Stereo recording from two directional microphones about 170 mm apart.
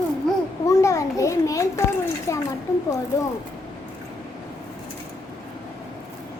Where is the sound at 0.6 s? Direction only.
20° left (ahead or behind).